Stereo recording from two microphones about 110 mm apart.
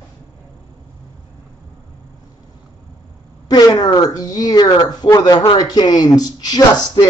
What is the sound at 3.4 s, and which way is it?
Speech, 35° left (ahead or behind).